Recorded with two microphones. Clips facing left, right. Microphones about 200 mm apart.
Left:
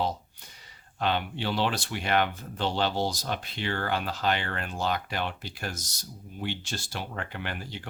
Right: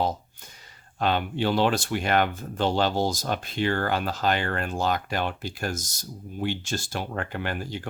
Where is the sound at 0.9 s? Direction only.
45° right (ahead or behind).